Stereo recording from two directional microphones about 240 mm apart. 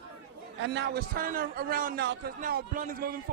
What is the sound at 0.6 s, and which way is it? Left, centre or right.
A man's voice, right.